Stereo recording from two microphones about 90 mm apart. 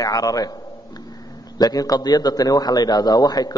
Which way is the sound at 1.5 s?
45° left (ahead or behind).